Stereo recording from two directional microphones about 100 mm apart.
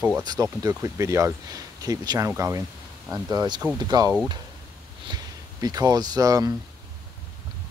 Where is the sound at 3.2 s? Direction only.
45° right (ahead or behind).